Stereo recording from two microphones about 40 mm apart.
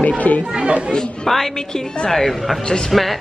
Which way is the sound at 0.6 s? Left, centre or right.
Right.